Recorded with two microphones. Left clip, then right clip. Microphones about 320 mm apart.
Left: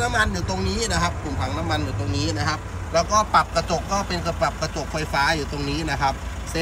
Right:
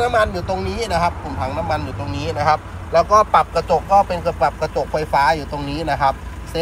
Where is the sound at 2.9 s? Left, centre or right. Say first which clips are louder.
Right 6 dB; centre.